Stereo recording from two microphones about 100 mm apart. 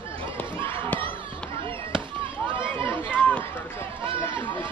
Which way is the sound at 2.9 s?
20° left (ahead or behind).